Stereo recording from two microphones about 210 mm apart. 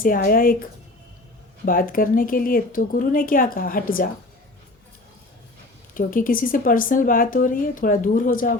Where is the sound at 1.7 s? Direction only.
40° left (ahead or behind).